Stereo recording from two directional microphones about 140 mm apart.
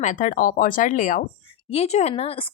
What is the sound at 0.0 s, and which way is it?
Speech, 60° left (ahead or behind).